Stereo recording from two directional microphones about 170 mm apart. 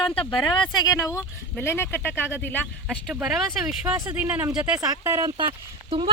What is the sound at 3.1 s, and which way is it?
Speech, 5° right (ahead or behind).